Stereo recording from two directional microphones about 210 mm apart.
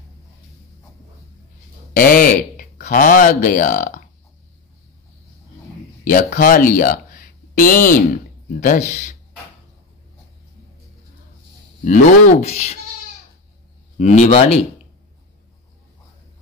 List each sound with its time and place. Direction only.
2.0 s speech: 40° left (ahead or behind)
6.0 s speech: 40° left (ahead or behind)
11.8 s speech: 40° left (ahead or behind)
13.9 s speech: 35° left (ahead or behind)